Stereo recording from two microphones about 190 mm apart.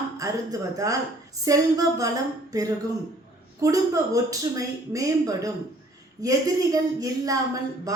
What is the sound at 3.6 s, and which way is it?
Speech, 15° right (ahead or behind).